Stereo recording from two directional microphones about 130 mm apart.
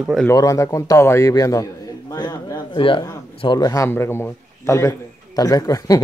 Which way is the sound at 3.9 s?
20° left (ahead or behind).